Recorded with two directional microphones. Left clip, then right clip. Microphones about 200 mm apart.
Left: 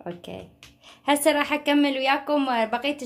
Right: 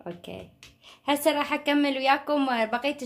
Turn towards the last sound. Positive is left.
turn(degrees=0)  # may be behind; listen again after turning